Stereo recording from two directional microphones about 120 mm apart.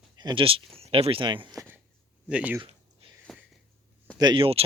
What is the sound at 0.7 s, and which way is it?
Speech, 55° right (ahead or behind).